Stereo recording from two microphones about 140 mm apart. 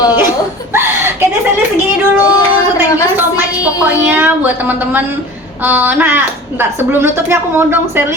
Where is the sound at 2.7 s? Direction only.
15° right (ahead or behind).